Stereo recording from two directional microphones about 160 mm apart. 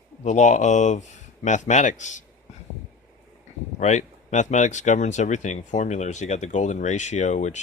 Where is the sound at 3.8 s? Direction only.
50° left (ahead or behind).